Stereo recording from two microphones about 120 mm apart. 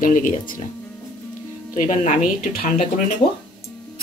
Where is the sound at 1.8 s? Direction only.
90° left.